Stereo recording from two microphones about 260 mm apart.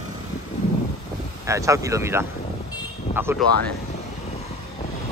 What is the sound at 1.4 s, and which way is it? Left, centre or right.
Speech, centre.